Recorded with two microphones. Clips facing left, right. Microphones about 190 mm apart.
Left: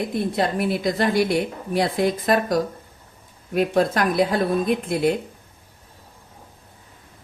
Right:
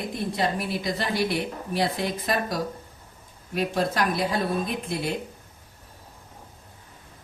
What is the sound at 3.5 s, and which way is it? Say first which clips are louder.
Speech: left 6 dB; 55° left (ahead or behind).